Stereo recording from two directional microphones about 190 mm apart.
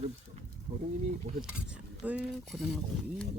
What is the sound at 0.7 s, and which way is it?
Speech, 25° right (ahead or behind).